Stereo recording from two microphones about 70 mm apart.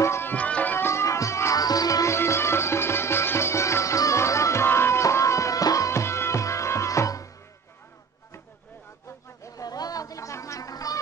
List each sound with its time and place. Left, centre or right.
0.0 s music: left
0.3 s music: left
0.7 s music: left
1.6 s music: left
2.1 s music: left
9.4 s a sound: left